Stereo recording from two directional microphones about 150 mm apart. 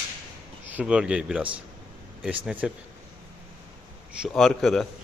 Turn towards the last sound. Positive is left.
turn(degrees=0)  # may be behind; listen again after turning